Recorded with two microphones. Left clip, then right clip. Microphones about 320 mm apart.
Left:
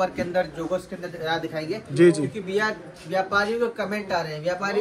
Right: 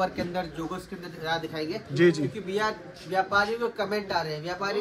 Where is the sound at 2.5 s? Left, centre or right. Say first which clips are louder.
Left 4 dB; right.